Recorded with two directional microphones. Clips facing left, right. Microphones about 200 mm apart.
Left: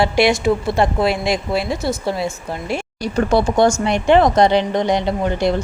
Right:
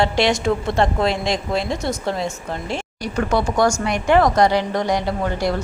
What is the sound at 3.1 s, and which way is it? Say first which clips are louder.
A woman's voice: left 4 dB; 30° left (ahead or behind).